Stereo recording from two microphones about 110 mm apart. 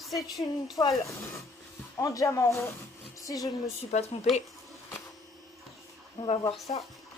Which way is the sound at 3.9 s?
90° left.